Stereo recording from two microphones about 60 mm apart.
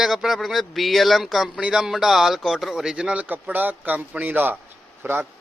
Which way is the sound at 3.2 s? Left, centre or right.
Right.